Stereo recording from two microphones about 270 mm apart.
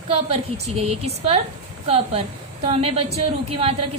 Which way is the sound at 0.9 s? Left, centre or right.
Right.